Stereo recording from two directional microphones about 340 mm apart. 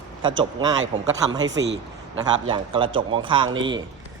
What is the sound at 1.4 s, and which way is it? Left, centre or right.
Speech, right.